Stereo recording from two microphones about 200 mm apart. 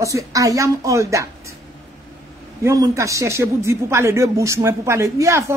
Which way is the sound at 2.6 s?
15° right (ahead or behind).